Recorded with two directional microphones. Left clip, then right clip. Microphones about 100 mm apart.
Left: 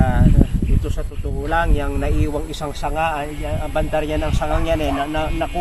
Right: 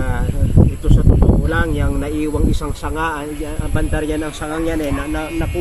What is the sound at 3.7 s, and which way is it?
Speech, 60° left (ahead or behind).